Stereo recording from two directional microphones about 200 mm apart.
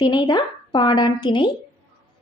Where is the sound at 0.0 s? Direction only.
20° left (ahead or behind).